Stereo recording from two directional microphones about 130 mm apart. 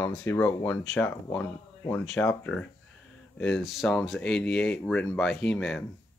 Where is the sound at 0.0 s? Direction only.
20° left (ahead or behind); by 5.9 s 5° left (ahead or behind).